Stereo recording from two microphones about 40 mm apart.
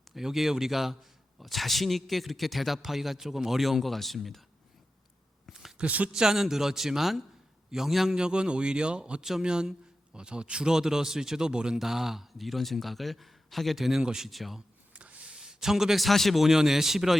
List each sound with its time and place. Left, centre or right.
0.1 s speech: centre
6.1 s speech: centre
8.1 s speech: right
11.8 s speech: centre
14.3 s speech: centre
14.9 s a sound: right
15.4 s a man's voice: centre
16.0 s speech: centre
16.4 s speech: centre